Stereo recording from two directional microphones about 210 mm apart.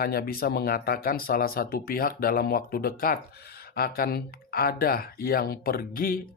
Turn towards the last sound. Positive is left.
turn(degrees=40)  # may be behind; listen again after turning